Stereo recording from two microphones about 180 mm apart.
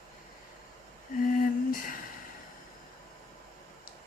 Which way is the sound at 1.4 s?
50° left (ahead or behind).